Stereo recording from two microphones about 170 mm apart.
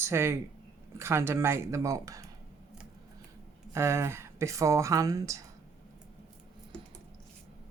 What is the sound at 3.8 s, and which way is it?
Speech, 15° right (ahead or behind).